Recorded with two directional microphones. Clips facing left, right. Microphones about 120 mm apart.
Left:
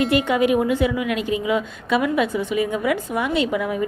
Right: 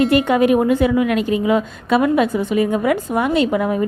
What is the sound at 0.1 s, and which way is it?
A woman's voice, 45° right (ahead or behind).